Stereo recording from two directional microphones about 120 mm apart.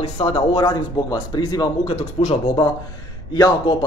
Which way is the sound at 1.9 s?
50° left (ahead or behind).